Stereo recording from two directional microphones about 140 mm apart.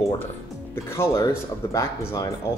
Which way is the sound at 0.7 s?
20° left (ahead or behind).